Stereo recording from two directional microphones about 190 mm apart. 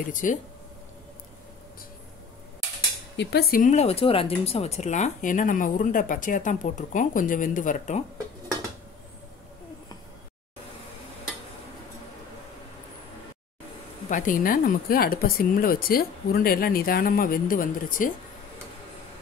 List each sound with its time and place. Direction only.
0.1 s speech: 45° left (ahead or behind)
3.2 s speech: 60° left (ahead or behind); by 8.0 s 40° left (ahead or behind)
14.0 s speech: 45° left (ahead or behind)